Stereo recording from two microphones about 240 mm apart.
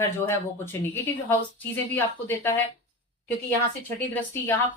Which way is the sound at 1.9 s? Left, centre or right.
Centre.